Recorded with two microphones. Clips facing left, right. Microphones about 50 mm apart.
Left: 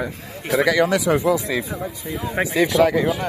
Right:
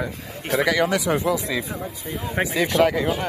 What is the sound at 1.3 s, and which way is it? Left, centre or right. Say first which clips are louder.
Speech: left 2 dB; left.